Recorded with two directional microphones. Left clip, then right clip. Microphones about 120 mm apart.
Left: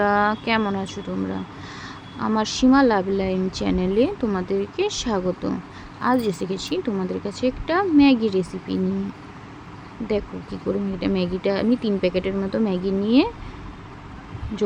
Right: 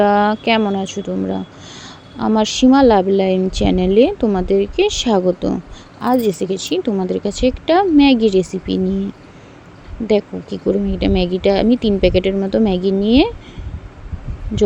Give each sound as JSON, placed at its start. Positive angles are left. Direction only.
{"t": 0.0, "sound": "speech", "side_deg": -35}
{"t": 10.1, "sound": "speech", "side_deg": -45}